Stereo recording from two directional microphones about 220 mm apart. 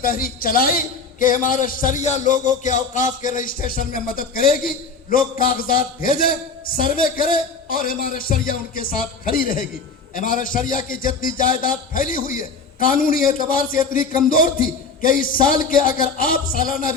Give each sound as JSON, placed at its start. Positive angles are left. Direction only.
{"t": 0.0, "sound": "a man's voice", "side_deg": 40}